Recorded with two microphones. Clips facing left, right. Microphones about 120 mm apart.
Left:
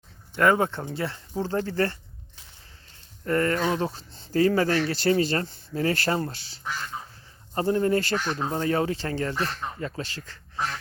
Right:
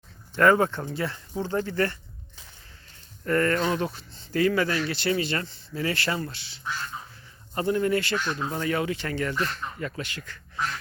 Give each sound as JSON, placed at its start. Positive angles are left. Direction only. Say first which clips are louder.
{"t": 0.3, "sound": "speech", "louder": "right 1 dB", "side_deg": 20}
{"t": 3.2, "sound": "speech", "louder": "even", "side_deg": 25}